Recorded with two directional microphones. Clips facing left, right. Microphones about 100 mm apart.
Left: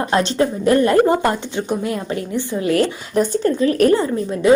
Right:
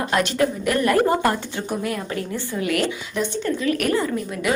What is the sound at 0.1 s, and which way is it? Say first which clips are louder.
A woman's voice: left 3 dB; 30° left (ahead or behind).